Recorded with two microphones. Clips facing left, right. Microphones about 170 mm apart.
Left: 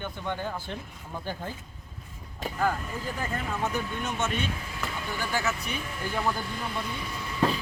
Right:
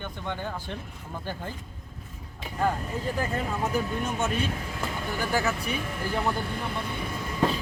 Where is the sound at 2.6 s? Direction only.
30° right (ahead or behind).